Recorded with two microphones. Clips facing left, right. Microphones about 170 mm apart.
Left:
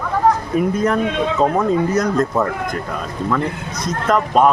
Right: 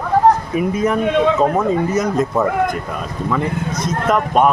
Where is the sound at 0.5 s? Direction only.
5° right (ahead or behind).